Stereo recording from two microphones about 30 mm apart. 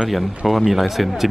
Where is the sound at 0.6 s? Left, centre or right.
Centre.